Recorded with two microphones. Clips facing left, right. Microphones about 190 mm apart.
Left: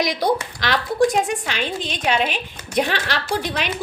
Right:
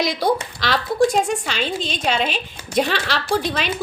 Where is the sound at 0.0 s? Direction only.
15° left (ahead or behind).